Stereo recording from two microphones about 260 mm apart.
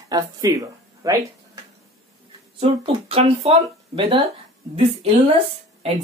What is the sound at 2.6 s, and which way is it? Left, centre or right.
Speech, right.